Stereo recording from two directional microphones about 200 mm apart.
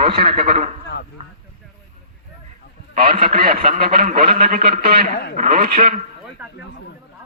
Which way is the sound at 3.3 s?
45° right (ahead or behind).